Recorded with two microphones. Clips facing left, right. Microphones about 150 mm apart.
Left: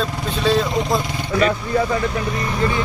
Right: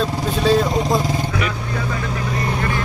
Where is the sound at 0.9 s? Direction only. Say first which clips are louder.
Right 3 dB; 40° right (ahead or behind).